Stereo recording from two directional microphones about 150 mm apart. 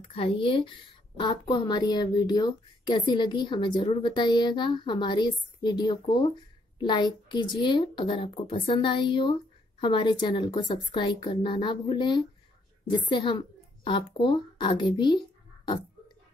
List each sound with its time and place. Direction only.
0.0 s speech: 35° left (ahead or behind)